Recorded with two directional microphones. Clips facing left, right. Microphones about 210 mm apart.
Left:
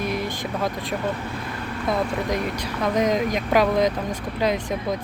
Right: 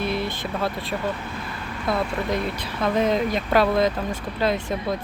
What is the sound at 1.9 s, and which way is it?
Speech, 15° left (ahead or behind).